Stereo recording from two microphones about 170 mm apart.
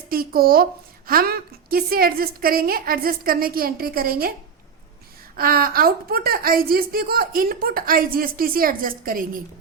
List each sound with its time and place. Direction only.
0.1 s a woman's voice: 60° right (ahead or behind)
5.4 s a woman's voice: 60° right (ahead or behind)